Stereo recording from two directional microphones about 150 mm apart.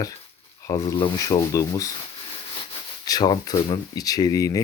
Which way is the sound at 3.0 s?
25° left (ahead or behind).